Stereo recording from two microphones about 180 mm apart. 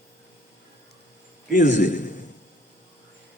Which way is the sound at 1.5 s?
45° left (ahead or behind).